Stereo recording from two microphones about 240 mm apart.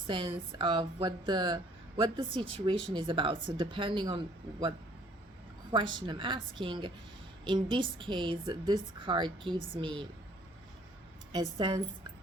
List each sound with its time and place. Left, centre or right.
0.1 s speech: right
5.7 s speech: centre
11.5 s a woman's voice: centre